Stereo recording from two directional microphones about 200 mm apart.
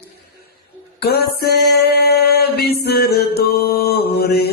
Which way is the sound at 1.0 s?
50° left (ahead or behind).